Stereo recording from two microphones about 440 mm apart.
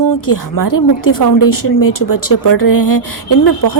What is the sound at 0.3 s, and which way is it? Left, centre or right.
Speech, left.